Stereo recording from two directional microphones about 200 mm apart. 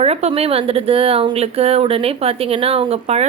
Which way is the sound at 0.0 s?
30° right (ahead or behind).